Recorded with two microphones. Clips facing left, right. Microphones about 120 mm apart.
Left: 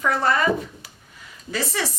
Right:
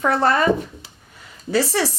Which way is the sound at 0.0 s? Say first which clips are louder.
Right 3 dB; 30° right (ahead or behind).